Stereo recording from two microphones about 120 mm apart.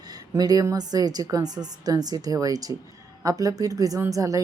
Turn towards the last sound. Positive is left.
turn(degrees=-30)  # may be behind; listen again after turning